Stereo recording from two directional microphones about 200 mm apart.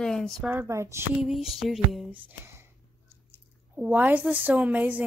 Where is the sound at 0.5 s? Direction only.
15° right (ahead or behind).